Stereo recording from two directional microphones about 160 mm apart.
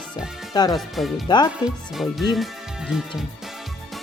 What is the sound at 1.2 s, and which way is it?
Speech, 30° left (ahead or behind).